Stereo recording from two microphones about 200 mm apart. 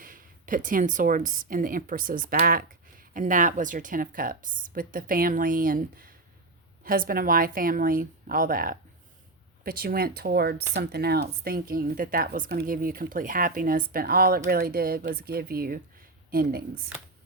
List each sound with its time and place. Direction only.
0.0 s speech: 40° right (ahead or behind)